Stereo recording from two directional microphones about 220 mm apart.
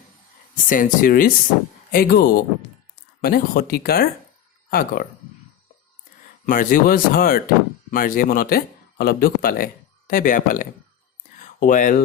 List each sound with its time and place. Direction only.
0.5 s speech: 40° left (ahead or behind)
6.4 s speech: 40° left (ahead or behind)